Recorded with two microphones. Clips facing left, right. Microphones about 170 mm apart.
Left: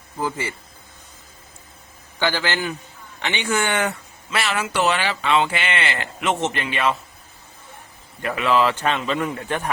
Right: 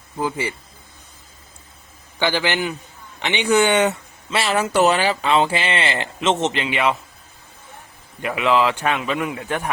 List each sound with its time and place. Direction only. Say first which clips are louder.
0.2 s a man's voice: right 2 dB; 15° right (ahead or behind)
2.1 s a man's voice: right 2 dB; 15° right (ahead or behind)
8.2 s a man's voice: right 1 dB; 15° right (ahead or behind)